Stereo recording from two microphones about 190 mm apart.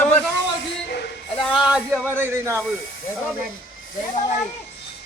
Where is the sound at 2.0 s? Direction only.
10° right (ahead or behind).